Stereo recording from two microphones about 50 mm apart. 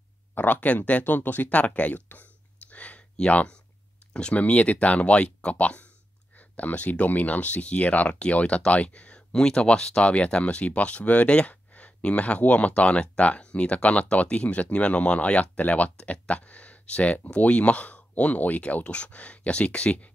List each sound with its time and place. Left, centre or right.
0.3 s speech: left
2.7 s a sound: left
3.2 s speech: centre